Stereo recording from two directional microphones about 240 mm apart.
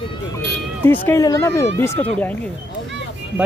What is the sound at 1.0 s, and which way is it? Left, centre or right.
Speech, centre.